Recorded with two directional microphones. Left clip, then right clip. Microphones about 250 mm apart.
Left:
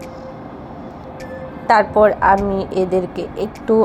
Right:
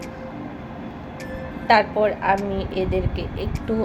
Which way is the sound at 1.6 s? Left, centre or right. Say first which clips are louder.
Left 5 dB; left.